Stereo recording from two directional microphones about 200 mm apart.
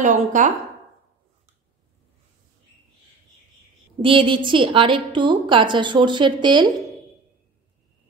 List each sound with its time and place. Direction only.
0.0 s speech: 40° right (ahead or behind)
4.0 s a woman's voice: 25° right (ahead or behind)